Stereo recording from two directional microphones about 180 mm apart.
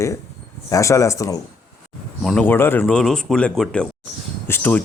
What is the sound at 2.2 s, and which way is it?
Speech, 10° left (ahead or behind).